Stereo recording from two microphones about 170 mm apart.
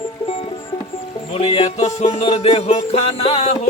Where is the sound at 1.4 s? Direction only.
30° left (ahead or behind).